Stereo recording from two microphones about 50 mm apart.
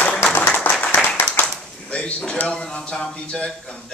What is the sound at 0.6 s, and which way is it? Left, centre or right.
Clapping, left.